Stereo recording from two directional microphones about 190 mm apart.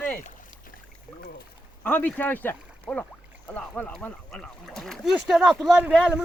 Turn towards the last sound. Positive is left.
turn(degrees=-5)  # may be behind; listen again after turning